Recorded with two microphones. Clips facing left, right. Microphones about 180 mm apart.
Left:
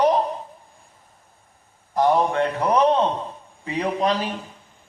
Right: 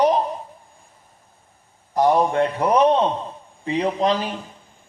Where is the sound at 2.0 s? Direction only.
15° right (ahead or behind).